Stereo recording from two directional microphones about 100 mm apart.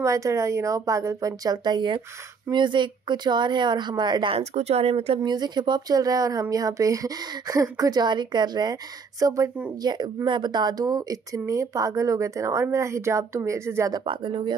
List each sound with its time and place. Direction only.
0.0 s a woman's voice: 30° right (ahead or behind); by 4.4 s 50° right (ahead or behind)
4.4 s speech: 90° right
5.2 s a woman's voice: 45° right (ahead or behind)
9.2 s speech: 30° right (ahead or behind)
9.8 s a woman's voice: 45° right (ahead or behind); by 13.8 s 25° right (ahead or behind)
14.0 s speech: 55° right (ahead or behind)